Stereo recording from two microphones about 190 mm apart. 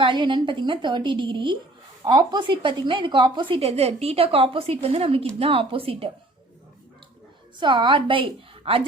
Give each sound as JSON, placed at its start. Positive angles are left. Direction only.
{"t": 0.0, "sound": "a woman's voice", "side_deg": -25}
{"t": 7.6, "sound": "a woman's voice", "side_deg": -25}